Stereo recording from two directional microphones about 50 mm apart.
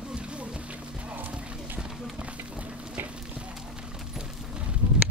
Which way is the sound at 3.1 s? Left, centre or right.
Right.